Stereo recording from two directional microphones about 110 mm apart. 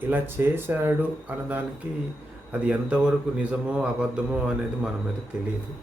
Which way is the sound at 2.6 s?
10° right (ahead or behind).